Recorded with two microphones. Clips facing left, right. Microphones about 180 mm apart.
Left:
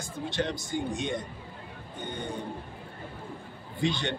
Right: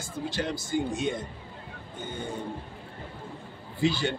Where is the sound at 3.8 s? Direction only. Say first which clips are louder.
Right 3 dB; 5° right (ahead or behind).